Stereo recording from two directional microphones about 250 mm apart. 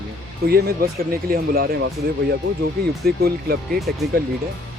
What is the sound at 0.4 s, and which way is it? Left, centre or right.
Speech, right.